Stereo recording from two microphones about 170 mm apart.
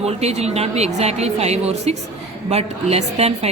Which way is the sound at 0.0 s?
40° right (ahead or behind).